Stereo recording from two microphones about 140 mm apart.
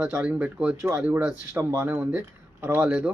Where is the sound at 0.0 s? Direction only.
5° right (ahead or behind).